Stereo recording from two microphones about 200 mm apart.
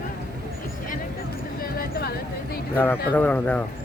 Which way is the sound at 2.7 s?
10° left (ahead or behind).